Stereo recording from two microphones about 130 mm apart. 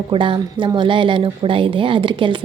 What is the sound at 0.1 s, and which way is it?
A woman's voice, 40° right (ahead or behind).